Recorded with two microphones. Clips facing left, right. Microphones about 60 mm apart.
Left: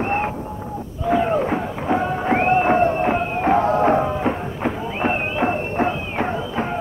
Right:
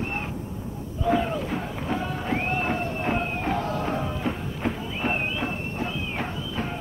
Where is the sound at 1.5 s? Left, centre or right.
Left.